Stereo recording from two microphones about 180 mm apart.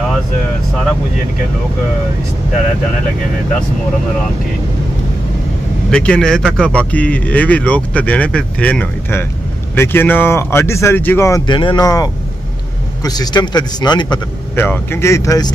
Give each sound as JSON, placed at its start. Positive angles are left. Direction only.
{"t": 5.9, "sound": "a man's voice", "side_deg": 5}
{"t": 14.5, "sound": "speech", "side_deg": 10}